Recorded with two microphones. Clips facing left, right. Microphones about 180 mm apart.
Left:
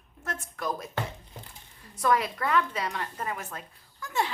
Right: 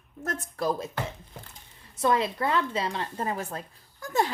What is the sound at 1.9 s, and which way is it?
A woman's voice, 25° right (ahead or behind).